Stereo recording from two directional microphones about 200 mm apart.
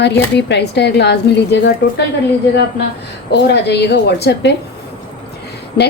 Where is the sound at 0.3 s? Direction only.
60° left (ahead or behind).